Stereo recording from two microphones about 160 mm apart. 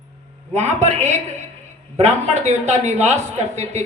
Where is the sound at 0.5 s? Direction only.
45° right (ahead or behind).